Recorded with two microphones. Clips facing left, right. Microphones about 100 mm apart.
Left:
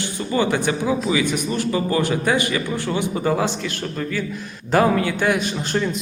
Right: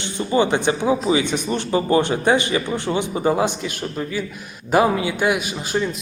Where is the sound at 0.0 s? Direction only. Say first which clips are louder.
Right 2 dB; 20° right (ahead or behind).